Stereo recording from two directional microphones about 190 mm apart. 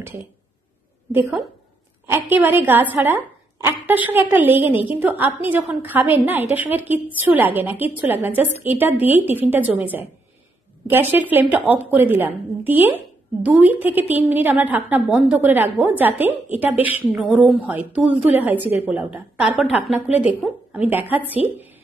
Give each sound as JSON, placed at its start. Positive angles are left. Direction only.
{"t": 2.0, "sound": "a woman's voice", "side_deg": -10}